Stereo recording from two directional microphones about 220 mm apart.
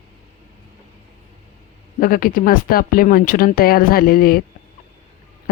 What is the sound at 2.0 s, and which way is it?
Speech, 40° left (ahead or behind).